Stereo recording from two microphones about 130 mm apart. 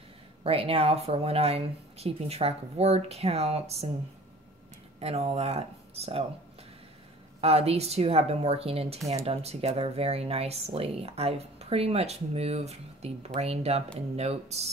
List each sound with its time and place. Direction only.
0.4 s a woman's voice: 45° right (ahead or behind)
5.0 s a woman's voice: 50° right (ahead or behind)
7.3 s a woman's voice: 50° right (ahead or behind)